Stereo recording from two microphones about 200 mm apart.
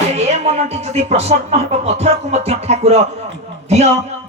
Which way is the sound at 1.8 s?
35° right (ahead or behind).